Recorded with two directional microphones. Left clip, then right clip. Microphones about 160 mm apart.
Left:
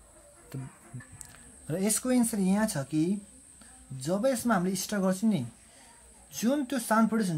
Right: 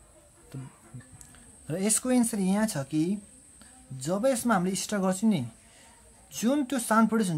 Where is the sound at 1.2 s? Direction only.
Centre (ahead or behind).